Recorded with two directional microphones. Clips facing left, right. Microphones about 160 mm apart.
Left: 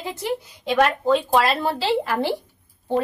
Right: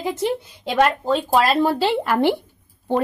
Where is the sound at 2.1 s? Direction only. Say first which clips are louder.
Right 5 dB; 60° right (ahead or behind).